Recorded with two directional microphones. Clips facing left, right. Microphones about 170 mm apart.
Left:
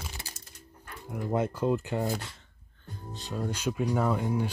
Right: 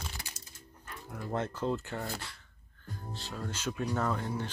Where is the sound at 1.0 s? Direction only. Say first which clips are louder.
Left 6 dB; 15° left (ahead or behind).